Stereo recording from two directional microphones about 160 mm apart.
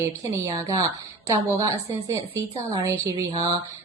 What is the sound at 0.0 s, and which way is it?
A woman's voice, 20° right (ahead or behind).